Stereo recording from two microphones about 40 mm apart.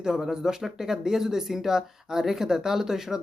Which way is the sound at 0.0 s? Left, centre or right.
Centre.